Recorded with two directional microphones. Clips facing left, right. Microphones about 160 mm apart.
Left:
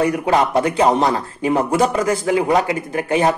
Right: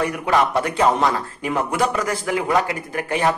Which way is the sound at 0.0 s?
25° left (ahead or behind).